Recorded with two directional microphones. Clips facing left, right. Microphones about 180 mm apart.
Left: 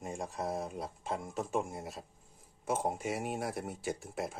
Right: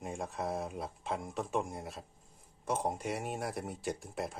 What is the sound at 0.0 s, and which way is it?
Speech, centre (ahead or behind).